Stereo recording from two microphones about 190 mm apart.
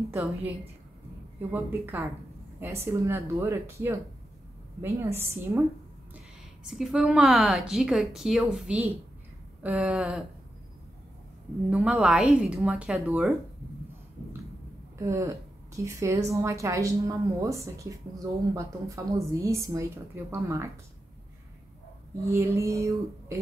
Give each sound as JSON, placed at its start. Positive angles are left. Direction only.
{"t": 0.1, "sound": "a woman's voice", "side_deg": -10}
{"t": 6.6, "sound": "a woman's voice", "side_deg": -5}
{"t": 11.7, "sound": "a woman's voice", "side_deg": -5}
{"t": 15.0, "sound": "a woman's voice", "side_deg": -15}
{"t": 22.3, "sound": "a woman's voice", "side_deg": -15}